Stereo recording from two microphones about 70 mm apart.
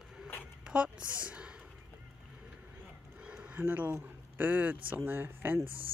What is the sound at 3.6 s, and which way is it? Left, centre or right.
Speech, right.